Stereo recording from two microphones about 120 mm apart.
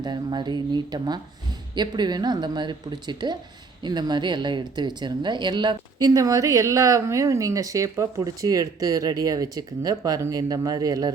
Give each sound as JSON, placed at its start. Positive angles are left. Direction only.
{"t": 0.0, "sound": "speech", "side_deg": -40}